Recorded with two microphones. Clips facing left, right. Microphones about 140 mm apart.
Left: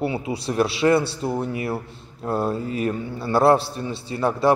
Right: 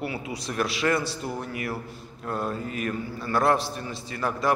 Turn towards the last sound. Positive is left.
turn(degrees=30)  # may be behind; listen again after turning